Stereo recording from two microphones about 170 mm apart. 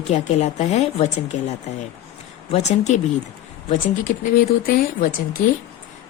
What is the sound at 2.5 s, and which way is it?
Speech, 40° left (ahead or behind).